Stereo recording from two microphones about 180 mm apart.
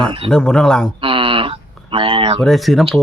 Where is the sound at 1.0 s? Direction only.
30° right (ahead or behind).